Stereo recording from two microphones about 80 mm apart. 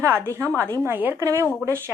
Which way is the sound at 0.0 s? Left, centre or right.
Right.